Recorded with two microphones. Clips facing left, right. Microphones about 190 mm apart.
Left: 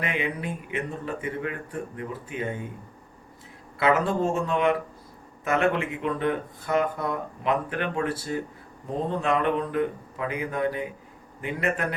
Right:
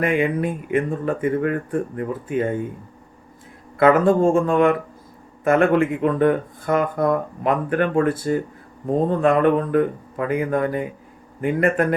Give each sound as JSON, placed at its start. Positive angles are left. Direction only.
{"t": 0.0, "sound": "speech", "side_deg": -50}
{"t": 3.8, "sound": "speech", "side_deg": -50}